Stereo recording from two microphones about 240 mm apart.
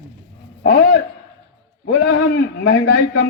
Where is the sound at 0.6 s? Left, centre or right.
Left.